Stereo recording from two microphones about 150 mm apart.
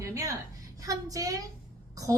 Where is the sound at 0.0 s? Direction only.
20° right (ahead or behind).